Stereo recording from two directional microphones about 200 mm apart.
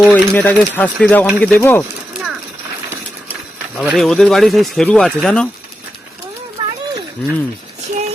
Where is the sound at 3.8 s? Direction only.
Centre (ahead or behind).